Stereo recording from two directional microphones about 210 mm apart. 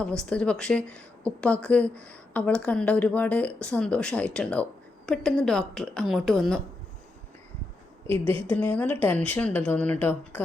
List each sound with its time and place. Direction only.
0.2 s speech: 5° left (ahead or behind)
8.1 s a woman's voice: 25° right (ahead or behind)
8.5 s speech: 5° left (ahead or behind)